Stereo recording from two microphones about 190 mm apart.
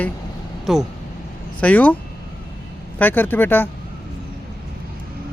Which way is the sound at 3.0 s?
10° left (ahead or behind).